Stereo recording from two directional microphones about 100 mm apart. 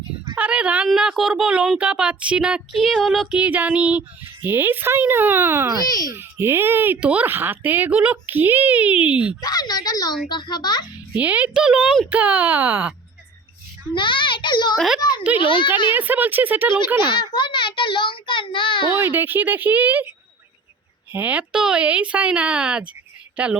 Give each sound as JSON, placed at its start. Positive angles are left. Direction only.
{"t": 0.3, "sound": "speech", "side_deg": -15}
{"t": 9.4, "sound": "a woman's voice", "side_deg": 40}
{"t": 11.1, "sound": "speech", "side_deg": -15}
{"t": 13.9, "sound": "a child's voice", "side_deg": 55}
{"t": 14.8, "sound": "a child's voice", "side_deg": -5}
{"t": 15.4, "sound": "a child's voice", "side_deg": 55}
{"t": 16.0, "sound": "speech", "side_deg": -15}
{"t": 17.2, "sound": "a child's voice", "side_deg": 50}
{"t": 18.9, "sound": "speech", "side_deg": -25}